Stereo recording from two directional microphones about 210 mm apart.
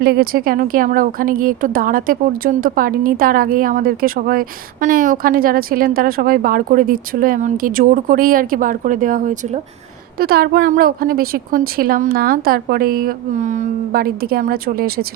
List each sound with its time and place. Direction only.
0.0 s a woman's voice: 45° right (ahead or behind)